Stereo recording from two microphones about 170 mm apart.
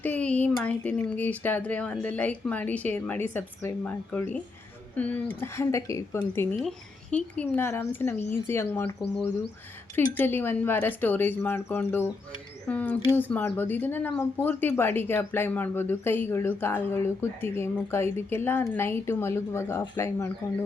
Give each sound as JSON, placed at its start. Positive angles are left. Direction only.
{"t": 0.0, "sound": "speech", "side_deg": 10}